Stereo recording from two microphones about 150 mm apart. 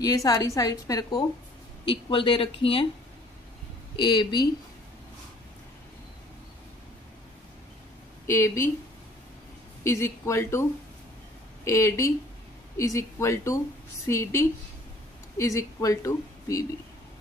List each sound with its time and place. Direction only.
0.0 s a woman's voice: 25° left (ahead or behind)
1.9 s speech: 35° left (ahead or behind)
3.9 s speech: 30° left (ahead or behind)
8.3 s speech: 15° left (ahead or behind)
9.8 s a woman's voice: 20° left (ahead or behind)